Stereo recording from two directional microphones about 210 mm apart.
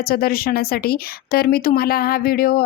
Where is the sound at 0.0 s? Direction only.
45° left (ahead or behind).